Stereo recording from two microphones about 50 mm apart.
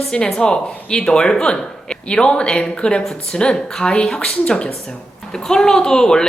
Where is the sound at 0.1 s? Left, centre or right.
Centre.